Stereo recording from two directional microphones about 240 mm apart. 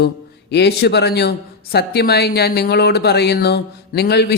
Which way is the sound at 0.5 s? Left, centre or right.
Left.